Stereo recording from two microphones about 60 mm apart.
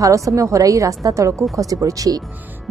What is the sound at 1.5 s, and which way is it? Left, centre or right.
Speech, right.